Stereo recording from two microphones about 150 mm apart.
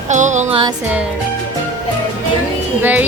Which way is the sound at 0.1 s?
55° right (ahead or behind).